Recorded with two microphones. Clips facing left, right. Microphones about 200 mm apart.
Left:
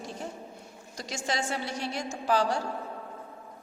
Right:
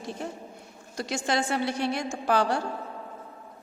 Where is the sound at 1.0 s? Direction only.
60° right (ahead or behind).